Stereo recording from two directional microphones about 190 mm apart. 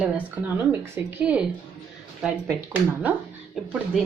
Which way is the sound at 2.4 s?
15° right (ahead or behind).